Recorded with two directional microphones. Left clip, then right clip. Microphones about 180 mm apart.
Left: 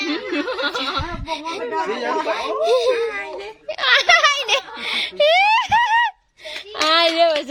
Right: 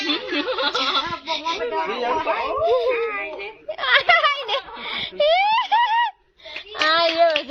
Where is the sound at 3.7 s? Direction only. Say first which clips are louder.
Left 2 dB; 25° left (ahead or behind).